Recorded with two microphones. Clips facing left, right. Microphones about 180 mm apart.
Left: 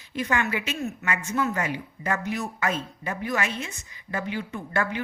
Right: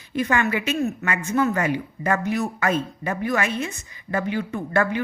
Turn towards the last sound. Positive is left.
turn(degrees=-55)  # may be behind; listen again after turning